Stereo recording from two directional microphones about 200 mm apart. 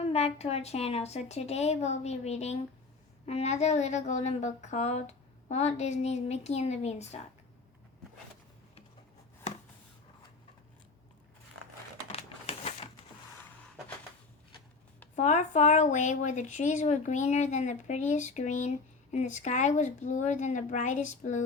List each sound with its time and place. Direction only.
0.1 s speech: 30° left (ahead or behind)
12.1 s a sound: 30° left (ahead or behind)
15.1 s speech: 35° left (ahead or behind)